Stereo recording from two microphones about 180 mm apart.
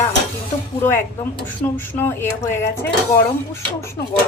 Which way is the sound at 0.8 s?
15° left (ahead or behind).